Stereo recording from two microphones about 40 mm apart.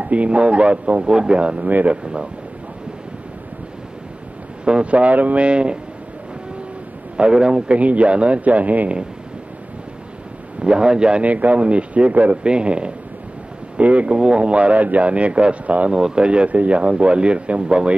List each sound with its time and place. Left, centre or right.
0.0 s speech: right
1.7 s speech: right
4.6 s speech: right
5.0 s a man's voice: right
7.2 s speech: right
7.7 s a man's voice: right
10.6 s speech: right
11.2 s a man's voice: right
12.4 s a man's voice: right
15.9 s speech: right